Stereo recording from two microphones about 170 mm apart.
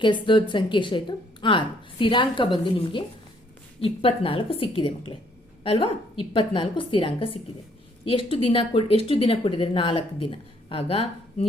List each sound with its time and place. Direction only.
0.0 s a woman's voice: 30° left (ahead or behind)